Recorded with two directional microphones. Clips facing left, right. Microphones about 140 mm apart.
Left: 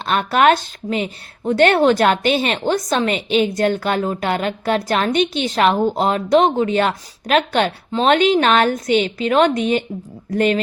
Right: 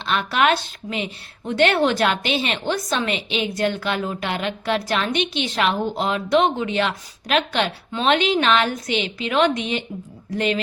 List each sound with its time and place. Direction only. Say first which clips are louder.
0.0 s a woman's voice: left 5 dB; 45° left (ahead or behind)